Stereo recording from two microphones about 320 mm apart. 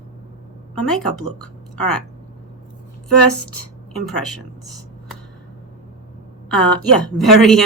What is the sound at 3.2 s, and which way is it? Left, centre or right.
Speech, left.